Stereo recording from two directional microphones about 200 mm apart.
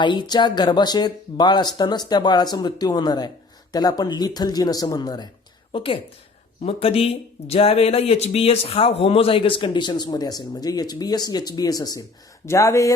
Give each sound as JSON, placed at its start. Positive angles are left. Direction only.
{"t": 0.0, "sound": "speech", "side_deg": 25}